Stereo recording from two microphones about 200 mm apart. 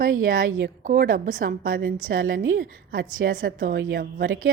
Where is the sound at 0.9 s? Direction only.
50° right (ahead or behind).